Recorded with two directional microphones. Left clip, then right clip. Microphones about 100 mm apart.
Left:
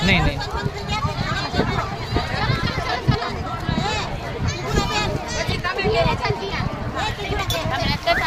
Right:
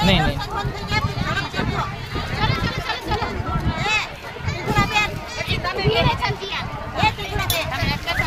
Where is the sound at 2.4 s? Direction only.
40° right (ahead or behind).